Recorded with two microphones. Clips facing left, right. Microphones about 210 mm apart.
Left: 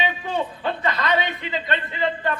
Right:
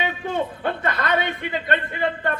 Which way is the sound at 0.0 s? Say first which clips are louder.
Right 1 dB; 50° right (ahead or behind).